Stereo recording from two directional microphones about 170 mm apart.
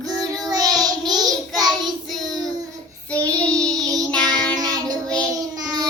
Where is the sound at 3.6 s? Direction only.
20° right (ahead or behind).